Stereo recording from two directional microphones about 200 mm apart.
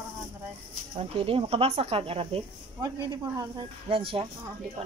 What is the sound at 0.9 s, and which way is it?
Speech, 30° right (ahead or behind).